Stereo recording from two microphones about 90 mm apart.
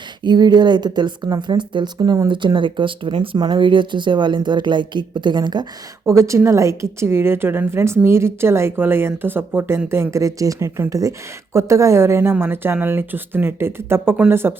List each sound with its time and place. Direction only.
0.2 s a woman's voice: 50° right (ahead or behind)
6.1 s a woman's voice: 35° right (ahead or behind)